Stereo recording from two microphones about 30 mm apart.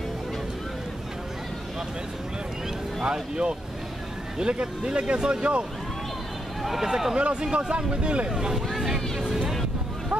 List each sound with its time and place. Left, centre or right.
3.0 s speech: right
6.6 s speech: centre
7.2 s speech: right
8.3 s speech: right
8.5 s speech: centre
9.2 s vehicle: centre